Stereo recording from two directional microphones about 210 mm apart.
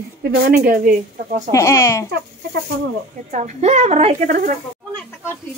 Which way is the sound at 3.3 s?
30° right (ahead or behind).